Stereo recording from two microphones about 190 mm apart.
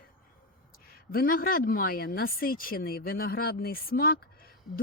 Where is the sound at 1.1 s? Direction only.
50° left (ahead or behind).